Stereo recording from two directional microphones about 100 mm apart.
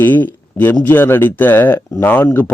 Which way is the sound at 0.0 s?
20° left (ahead or behind).